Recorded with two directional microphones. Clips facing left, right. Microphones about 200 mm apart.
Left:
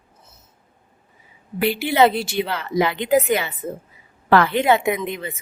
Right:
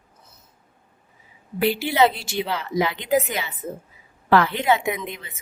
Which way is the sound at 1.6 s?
55° left (ahead or behind).